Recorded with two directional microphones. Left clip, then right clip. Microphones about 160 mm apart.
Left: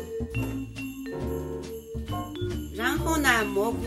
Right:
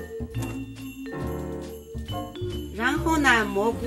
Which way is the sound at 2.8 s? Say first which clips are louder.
Right 3 dB; 45° right (ahead or behind).